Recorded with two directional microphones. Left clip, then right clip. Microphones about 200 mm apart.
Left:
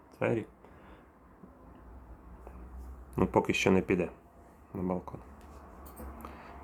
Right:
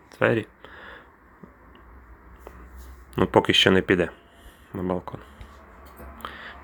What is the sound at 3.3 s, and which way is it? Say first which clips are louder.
Speech: right 10 dB; 15° right (ahead or behind).